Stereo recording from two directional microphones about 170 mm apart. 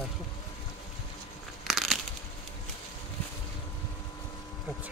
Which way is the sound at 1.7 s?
Centre (ahead or behind).